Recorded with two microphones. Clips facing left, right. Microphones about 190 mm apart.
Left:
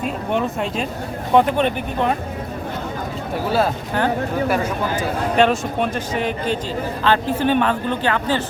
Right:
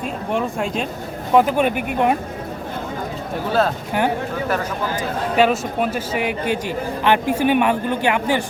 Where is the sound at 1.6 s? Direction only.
10° right (ahead or behind).